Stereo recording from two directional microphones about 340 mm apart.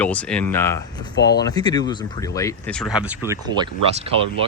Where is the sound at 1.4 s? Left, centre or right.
Centre.